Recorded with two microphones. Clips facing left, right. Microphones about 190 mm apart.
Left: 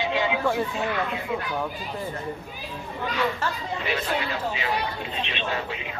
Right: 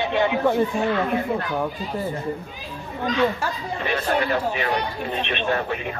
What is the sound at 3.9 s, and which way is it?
Speech, 55° right (ahead or behind).